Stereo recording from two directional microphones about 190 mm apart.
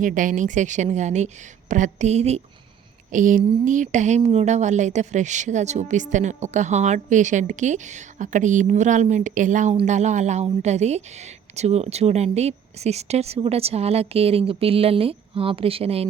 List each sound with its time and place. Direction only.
0.0 s a woman's voice: 45° right (ahead or behind)